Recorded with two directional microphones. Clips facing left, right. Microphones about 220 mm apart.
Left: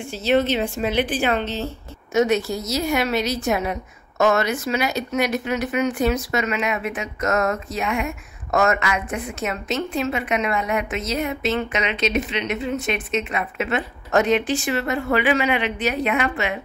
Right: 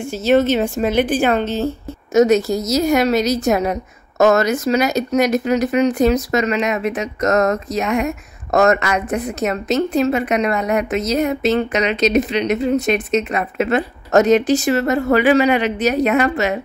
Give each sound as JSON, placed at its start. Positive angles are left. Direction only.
{"t": 0.1, "sound": "a woman's voice", "side_deg": -45}